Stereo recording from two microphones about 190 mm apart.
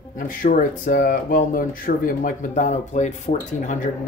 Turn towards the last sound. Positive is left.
turn(degrees=40)  # may be behind; listen again after turning